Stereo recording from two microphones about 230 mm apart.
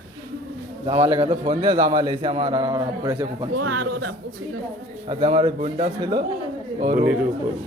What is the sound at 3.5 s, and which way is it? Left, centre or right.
Speech, right.